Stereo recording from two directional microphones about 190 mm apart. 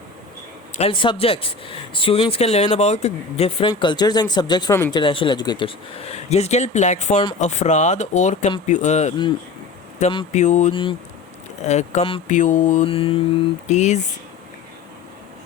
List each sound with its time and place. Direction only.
0.8 s speech: 30° left (ahead or behind)